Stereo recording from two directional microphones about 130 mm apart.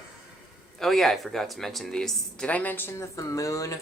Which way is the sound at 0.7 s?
Centre (ahead or behind).